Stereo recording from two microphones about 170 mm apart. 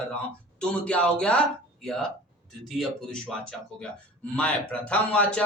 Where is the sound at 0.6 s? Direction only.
5° left (ahead or behind).